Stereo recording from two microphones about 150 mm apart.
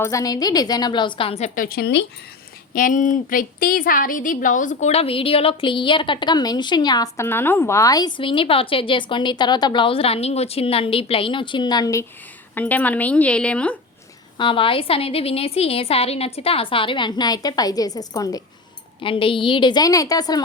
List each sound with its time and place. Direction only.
0.0 s a woman's voice: 20° left (ahead or behind); by 1.5 s 40° left (ahead or behind)
1.5 s speech: 80° left
2.7 s a woman's voice: 60° left (ahead or behind); by 12.0 s 25° left (ahead or behind)
12.5 s a woman's voice: 10° left (ahead or behind)
14.3 s a woman's voice: 35° left (ahead or behind)
19.0 s a woman's voice: 35° left (ahead or behind)